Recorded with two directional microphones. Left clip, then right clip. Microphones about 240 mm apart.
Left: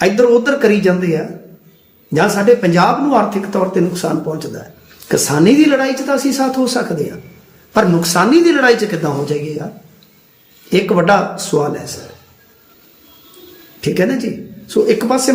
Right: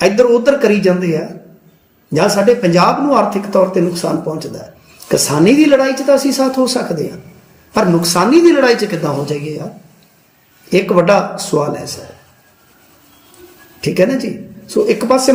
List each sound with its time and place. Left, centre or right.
0.0 s speech: centre
10.7 s speech: centre
13.8 s speech: centre